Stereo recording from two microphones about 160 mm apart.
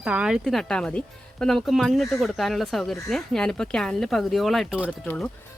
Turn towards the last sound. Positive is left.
turn(degrees=5)  # may be behind; listen again after turning